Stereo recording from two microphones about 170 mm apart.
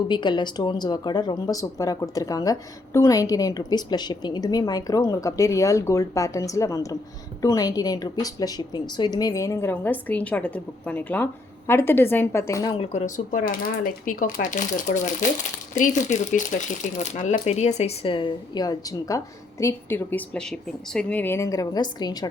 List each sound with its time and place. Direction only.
0.1 s speech: 25° left (ahead or behind)
12.7 s speech: 35° left (ahead or behind)